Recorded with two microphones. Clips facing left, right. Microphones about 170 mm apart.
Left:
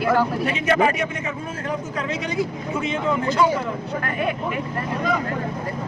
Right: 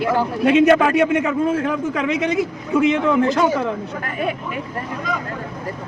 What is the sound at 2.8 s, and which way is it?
Speech, 70° right (ahead or behind).